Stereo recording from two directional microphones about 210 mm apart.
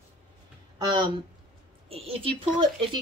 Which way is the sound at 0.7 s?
20° right (ahead or behind).